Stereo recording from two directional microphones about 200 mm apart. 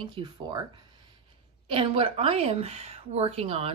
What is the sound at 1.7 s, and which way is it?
Speech, 25° right (ahead or behind).